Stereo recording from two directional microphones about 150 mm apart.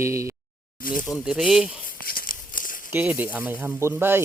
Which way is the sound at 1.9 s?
75° left (ahead or behind).